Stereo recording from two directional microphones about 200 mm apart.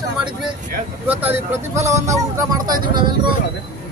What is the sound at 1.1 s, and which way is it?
Speech, 10° right (ahead or behind).